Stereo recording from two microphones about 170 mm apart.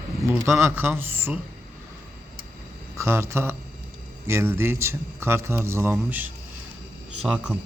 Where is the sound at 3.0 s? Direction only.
15° right (ahead or behind).